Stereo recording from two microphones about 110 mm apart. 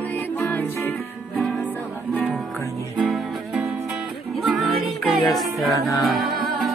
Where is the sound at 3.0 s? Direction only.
Centre (ahead or behind).